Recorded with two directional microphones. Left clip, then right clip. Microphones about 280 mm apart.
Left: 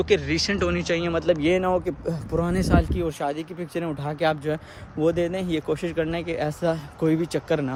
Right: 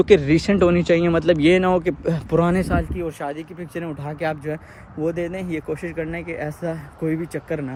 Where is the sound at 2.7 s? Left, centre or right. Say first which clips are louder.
Left 1 dB; centre.